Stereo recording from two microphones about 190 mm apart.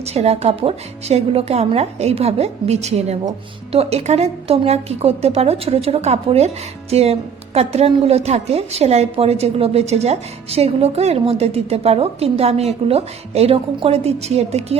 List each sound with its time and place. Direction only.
0.0 s a woman's voice: 35° right (ahead or behind)